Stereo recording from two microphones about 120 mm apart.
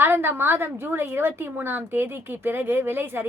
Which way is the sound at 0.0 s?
20° right (ahead or behind).